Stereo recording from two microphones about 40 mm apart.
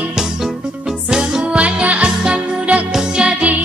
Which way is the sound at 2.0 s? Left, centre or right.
Centre.